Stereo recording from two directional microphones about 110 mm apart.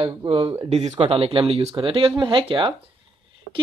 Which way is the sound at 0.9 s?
55° right (ahead or behind).